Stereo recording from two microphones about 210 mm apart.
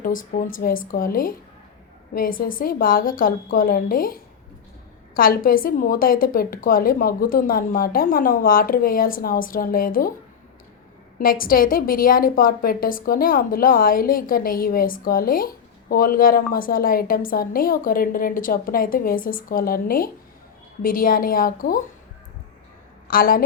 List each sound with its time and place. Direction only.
0.0 s a woman's voice: 40° left (ahead or behind)
11.2 s a woman's voice: 45° left (ahead or behind)
23.0 s a woman's voice: 45° left (ahead or behind)